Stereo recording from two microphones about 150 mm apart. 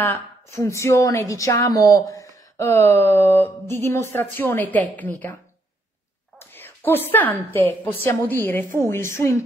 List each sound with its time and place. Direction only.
0.0 s a woman's voice: 20° left (ahead or behind)
6.4 s a woman's voice: 15° left (ahead or behind)